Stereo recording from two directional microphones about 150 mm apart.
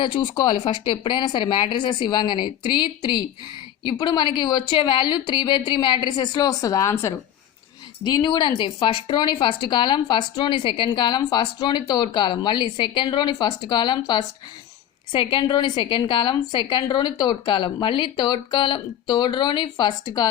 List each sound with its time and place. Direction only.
0.0 s a woman's voice: 35° left (ahead or behind)
8.2 s speech: 30° left (ahead or behind)